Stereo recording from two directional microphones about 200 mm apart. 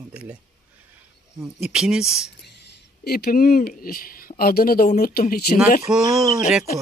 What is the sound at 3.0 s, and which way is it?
Speech, 50° left (ahead or behind).